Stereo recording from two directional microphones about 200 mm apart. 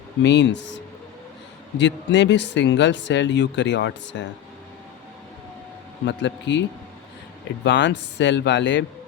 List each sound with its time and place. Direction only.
0.2 s speech: 60° left (ahead or behind)
1.8 s speech: 60° left (ahead or behind)
6.1 s speech: 65° left (ahead or behind)